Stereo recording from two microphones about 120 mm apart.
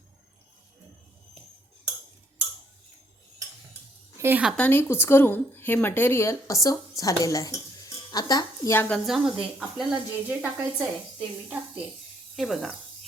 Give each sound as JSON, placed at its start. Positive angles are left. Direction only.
{"t": 4.2, "sound": "a woman's voice", "side_deg": -20}
{"t": 4.5, "sound": "a woman's voice", "side_deg": 15}
{"t": 8.7, "sound": "speech", "side_deg": 15}
{"t": 9.0, "sound": "speech", "side_deg": -10}
{"t": 12.4, "sound": "speech", "side_deg": 5}